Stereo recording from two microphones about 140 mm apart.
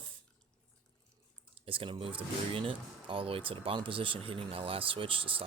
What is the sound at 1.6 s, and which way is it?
Speech, 40° right (ahead or behind).